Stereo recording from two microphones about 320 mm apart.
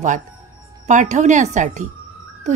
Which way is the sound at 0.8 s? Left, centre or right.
Right.